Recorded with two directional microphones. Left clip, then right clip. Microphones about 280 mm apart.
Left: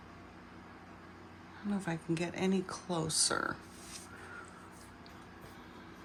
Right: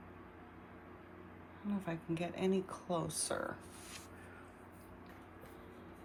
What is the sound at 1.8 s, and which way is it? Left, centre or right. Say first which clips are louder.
Speech: left 4 dB; centre.